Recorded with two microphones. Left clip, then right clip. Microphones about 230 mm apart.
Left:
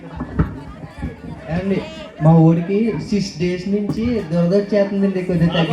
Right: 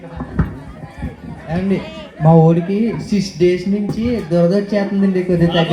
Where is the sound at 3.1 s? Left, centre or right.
Right.